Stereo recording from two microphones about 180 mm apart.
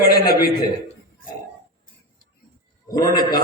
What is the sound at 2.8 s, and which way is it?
Speech, 20° left (ahead or behind).